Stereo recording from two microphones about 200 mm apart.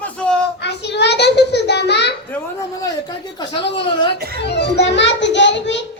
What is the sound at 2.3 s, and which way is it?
A woman's voice, 15° left (ahead or behind).